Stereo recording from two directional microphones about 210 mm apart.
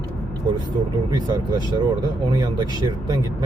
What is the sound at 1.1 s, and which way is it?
Speech, 20° right (ahead or behind).